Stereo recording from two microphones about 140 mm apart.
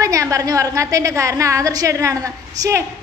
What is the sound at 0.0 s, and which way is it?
A woman's voice, 25° right (ahead or behind).